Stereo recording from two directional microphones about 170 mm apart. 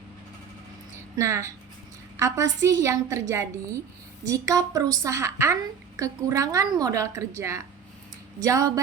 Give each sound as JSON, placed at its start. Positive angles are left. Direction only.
{"t": 1.1, "sound": "a woman's voice", "side_deg": -15}